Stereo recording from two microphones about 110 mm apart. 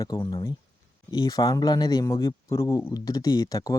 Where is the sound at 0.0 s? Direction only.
35° left (ahead or behind).